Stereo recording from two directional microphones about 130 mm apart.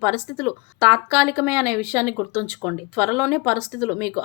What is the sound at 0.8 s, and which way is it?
A woman's voice, 20° right (ahead or behind).